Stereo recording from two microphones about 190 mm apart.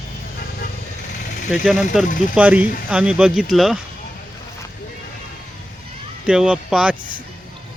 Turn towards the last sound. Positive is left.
turn(degrees=-5)  # may be behind; listen again after turning